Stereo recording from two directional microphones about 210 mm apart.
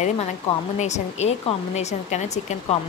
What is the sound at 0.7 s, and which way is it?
Speech, 35° left (ahead or behind).